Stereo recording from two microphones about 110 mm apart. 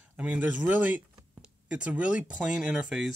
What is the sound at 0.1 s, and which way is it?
Speech, 15° right (ahead or behind).